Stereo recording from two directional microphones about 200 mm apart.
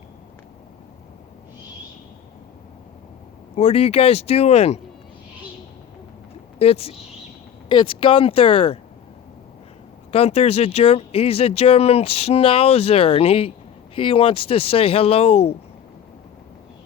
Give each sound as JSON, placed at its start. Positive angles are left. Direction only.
{"t": 3.5, "sound": "speech", "side_deg": 30}
{"t": 6.6, "sound": "speech", "side_deg": 30}
{"t": 10.1, "sound": "speech", "side_deg": 30}